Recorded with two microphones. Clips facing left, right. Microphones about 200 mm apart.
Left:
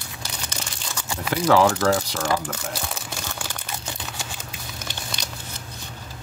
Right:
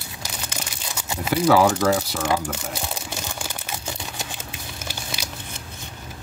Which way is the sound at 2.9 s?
15° right (ahead or behind).